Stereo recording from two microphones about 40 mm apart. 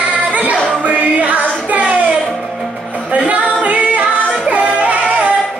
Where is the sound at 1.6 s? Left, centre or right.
Right.